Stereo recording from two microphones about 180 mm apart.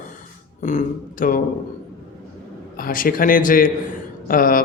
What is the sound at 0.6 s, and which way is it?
Speech, 45° left (ahead or behind).